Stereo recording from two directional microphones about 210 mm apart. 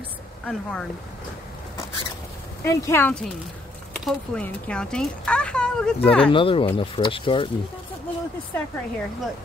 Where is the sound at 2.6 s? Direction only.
10° left (ahead or behind).